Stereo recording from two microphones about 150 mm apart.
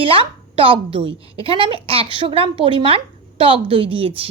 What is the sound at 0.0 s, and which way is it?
A woman's voice, 35° right (ahead or behind).